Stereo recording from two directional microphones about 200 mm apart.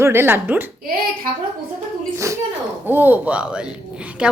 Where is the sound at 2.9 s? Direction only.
10° right (ahead or behind).